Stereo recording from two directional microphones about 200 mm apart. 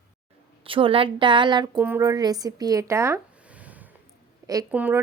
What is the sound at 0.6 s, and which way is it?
A woman's voice, 25° right (ahead or behind).